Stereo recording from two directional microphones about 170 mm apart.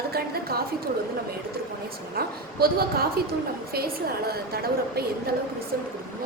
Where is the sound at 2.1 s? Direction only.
65° right (ahead or behind).